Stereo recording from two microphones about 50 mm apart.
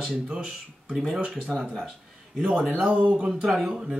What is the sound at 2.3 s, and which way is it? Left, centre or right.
A man's voice, centre.